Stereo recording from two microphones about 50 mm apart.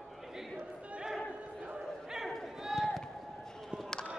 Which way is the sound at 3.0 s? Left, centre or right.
Centre.